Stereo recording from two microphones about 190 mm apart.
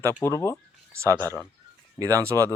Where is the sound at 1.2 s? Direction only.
15° right (ahead or behind).